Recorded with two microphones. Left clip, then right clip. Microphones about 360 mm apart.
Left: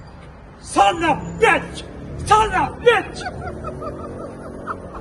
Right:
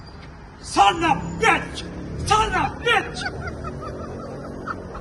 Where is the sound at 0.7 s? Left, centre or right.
Centre.